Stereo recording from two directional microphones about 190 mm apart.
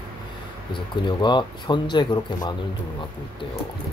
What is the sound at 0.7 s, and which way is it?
A man's voice, 25° left (ahead or behind).